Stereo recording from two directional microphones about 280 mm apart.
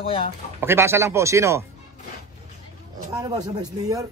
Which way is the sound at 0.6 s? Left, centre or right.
Centre.